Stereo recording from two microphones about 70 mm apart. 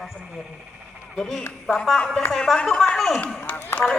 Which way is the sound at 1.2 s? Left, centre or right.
Centre.